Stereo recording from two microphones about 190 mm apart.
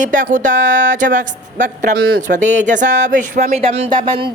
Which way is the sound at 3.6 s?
30° right (ahead or behind).